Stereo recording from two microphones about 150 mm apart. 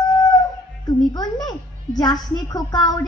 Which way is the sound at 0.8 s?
25° left (ahead or behind).